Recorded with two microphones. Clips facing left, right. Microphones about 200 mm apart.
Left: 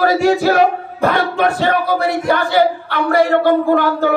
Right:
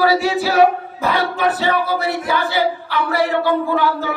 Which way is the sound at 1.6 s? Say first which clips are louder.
Left 3 dB; 50° left (ahead or behind).